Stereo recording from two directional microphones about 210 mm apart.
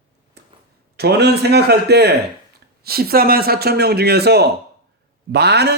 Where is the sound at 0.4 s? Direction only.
50° right (ahead or behind).